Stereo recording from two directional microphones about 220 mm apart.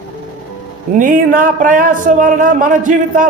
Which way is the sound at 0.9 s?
35° right (ahead or behind).